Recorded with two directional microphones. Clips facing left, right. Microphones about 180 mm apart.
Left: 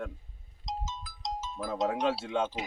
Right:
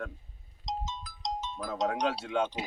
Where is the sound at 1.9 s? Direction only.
25° left (ahead or behind).